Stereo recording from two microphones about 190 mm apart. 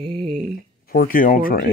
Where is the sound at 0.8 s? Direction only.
50° left (ahead or behind).